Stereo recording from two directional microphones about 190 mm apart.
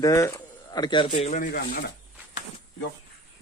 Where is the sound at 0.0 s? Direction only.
15° left (ahead or behind); by 1.8 s 50° left (ahead or behind).